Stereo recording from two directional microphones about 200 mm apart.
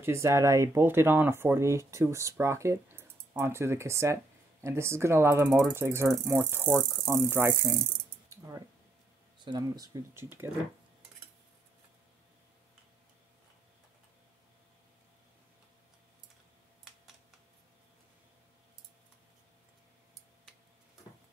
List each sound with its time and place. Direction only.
0.0 s speech: 15° right (ahead or behind)
8.3 s a sound: 15° right (ahead or behind)
9.4 s speech: 20° right (ahead or behind)